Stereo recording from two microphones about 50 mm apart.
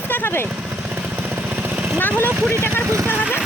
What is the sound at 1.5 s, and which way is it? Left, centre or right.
Jackhammer, right.